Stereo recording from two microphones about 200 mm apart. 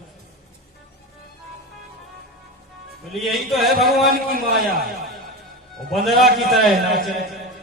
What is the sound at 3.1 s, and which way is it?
Speech, centre (ahead or behind).